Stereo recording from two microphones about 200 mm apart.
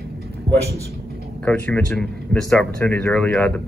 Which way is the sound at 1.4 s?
5° left (ahead or behind).